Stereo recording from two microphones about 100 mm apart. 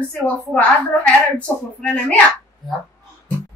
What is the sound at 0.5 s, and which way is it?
A woman's voice, 10° left (ahead or behind).